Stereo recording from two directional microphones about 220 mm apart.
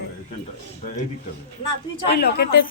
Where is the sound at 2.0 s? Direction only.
50° left (ahead or behind).